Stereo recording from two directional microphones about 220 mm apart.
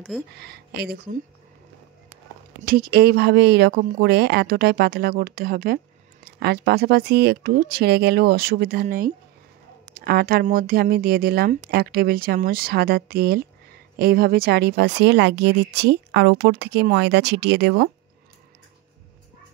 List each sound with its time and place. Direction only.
0.4 s speech: 45° right (ahead or behind)
2.6 s speech: 40° right (ahead or behind)